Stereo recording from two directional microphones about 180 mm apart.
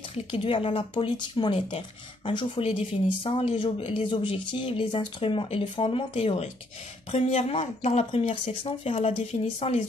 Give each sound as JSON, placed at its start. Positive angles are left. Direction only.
{"t": 0.1, "sound": "speech", "side_deg": 30}